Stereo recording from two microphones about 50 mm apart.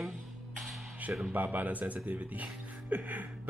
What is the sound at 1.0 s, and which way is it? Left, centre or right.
Music, right.